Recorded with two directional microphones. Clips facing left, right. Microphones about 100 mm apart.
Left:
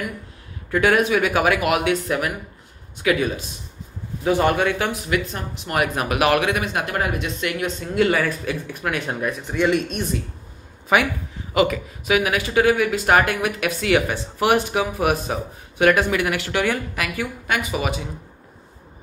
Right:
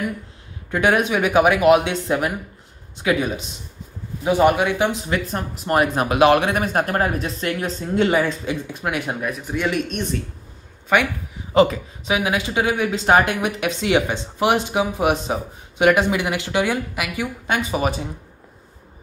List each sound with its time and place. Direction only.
0.7 s speech: 20° right (ahead or behind)
5.1 s speech: 40° right (ahead or behind); by 10.0 s centre (ahead or behind)
11.5 s speech: 30° right (ahead or behind)
17.5 s speech: 30° right (ahead or behind)